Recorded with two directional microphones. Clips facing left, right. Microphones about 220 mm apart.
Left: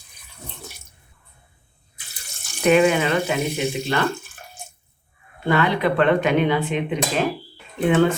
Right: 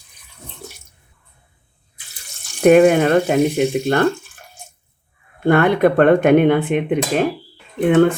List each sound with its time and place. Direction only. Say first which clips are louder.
2.6 s speech: right 6 dB; 50° right (ahead or behind)
5.5 s speech: right 6 dB; 55° right (ahead or behind)